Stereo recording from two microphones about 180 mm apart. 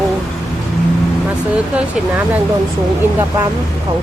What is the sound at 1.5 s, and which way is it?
Speech, 5° right (ahead or behind).